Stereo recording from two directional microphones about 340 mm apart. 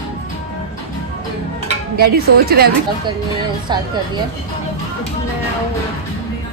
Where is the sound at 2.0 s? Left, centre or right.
Right.